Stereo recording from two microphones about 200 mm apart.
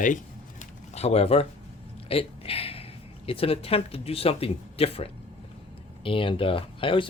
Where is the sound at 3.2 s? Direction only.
30° left (ahead or behind).